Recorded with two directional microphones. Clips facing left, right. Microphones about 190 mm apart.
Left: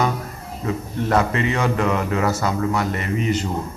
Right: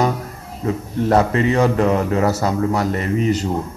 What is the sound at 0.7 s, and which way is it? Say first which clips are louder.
A man's voice: right 4 dB; 35° right (ahead or behind).